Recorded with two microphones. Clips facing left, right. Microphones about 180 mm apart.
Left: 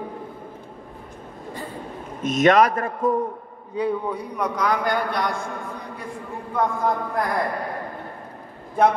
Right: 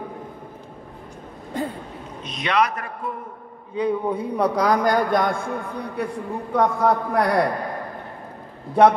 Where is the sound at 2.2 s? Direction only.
45° left (ahead or behind).